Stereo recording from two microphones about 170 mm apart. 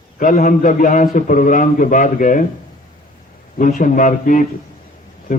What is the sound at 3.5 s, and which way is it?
Speech, 50° left (ahead or behind).